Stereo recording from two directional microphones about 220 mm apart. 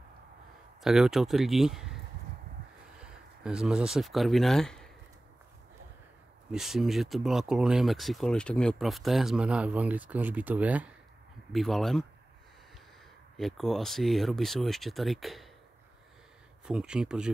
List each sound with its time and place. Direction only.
0.8 s speech: centre (ahead or behind)
3.0 s speech: 5° right (ahead or behind)
6.5 s speech: centre (ahead or behind)
13.4 s speech: centre (ahead or behind)
16.6 s speech: 5° right (ahead or behind)